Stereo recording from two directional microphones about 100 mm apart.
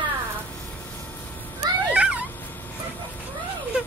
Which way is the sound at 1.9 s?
15° right (ahead or behind).